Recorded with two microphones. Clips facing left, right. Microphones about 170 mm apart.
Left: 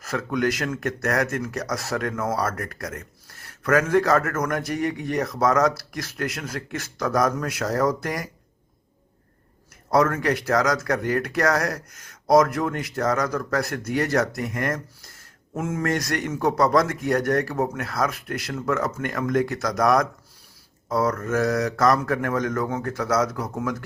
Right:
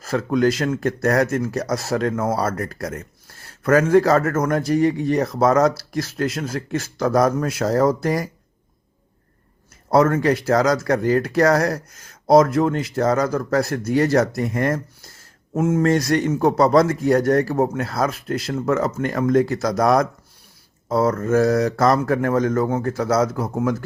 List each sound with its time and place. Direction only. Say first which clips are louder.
0.0 s a man's voice: right 6 dB; 30° right (ahead or behind)
9.9 s a man's voice: right 4 dB; 25° right (ahead or behind)